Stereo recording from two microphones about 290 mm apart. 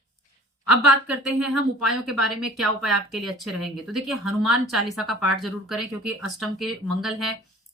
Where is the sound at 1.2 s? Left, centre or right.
Centre.